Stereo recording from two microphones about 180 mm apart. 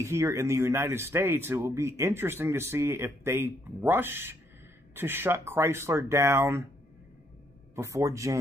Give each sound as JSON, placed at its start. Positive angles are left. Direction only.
{"t": 0.0, "sound": "speech", "side_deg": -15}
{"t": 7.7, "sound": "speech", "side_deg": -15}